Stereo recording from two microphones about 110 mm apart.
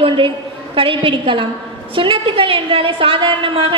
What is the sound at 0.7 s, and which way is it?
A woman's voice, 50° right (ahead or behind).